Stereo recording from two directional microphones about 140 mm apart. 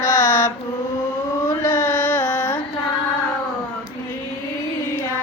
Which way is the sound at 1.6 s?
20° left (ahead or behind).